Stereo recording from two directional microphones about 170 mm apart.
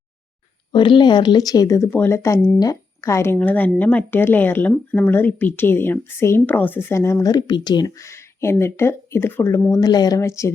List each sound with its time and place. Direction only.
0.7 s a woman's voice: 25° left (ahead or behind)